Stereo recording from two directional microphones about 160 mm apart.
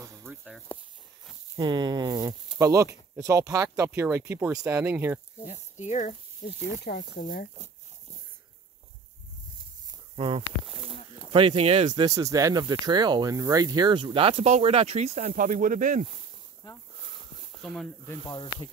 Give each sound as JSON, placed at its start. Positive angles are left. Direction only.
{"t": 0.2, "sound": "snake", "side_deg": 0}
{"t": 1.6, "sound": "speech", "side_deg": -25}
{"t": 5.5, "sound": "speech", "side_deg": 45}
{"t": 6.8, "sound": "speech", "side_deg": 75}
{"t": 10.1, "sound": "speech", "side_deg": -30}
{"t": 10.7, "sound": "speech", "side_deg": 0}
{"t": 11.3, "sound": "speech", "side_deg": -35}
{"t": 15.1, "sound": "speech", "side_deg": -50}
{"t": 17.6, "sound": "speech", "side_deg": 0}
{"t": 18.3, "sound": "speech", "side_deg": 30}